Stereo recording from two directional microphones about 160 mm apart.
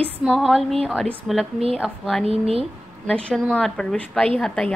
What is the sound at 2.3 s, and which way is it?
Speech, 40° right (ahead or behind).